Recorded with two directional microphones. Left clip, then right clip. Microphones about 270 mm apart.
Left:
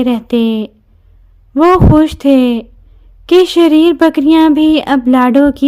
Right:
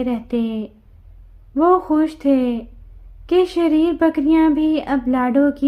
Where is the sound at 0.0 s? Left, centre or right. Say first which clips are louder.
Left 9 dB; left.